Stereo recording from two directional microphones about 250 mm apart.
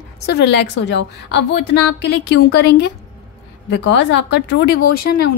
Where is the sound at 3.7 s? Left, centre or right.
Left.